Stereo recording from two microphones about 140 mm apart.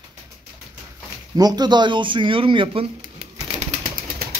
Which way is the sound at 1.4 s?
30° right (ahead or behind).